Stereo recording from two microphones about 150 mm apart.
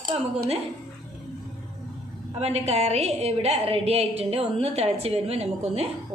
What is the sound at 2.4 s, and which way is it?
A woman's voice, 45° right (ahead or behind).